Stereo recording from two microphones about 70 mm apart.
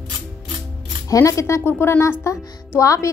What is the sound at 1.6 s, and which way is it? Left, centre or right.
Speech, left.